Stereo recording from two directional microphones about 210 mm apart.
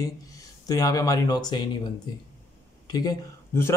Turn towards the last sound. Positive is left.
turn(degrees=15)  # may be behind; listen again after turning